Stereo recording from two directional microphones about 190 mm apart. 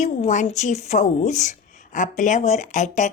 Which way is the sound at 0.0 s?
40° left (ahead or behind).